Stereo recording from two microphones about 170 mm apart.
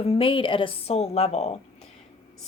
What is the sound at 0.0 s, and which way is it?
A woman's voice, 30° left (ahead or behind).